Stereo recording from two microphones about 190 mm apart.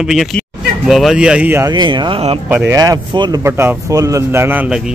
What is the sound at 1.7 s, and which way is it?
Speech, 25° right (ahead or behind).